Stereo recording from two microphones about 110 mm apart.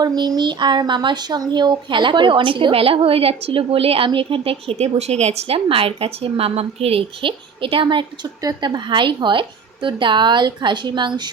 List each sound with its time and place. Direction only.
0.0 s speech: 40° right (ahead or behind)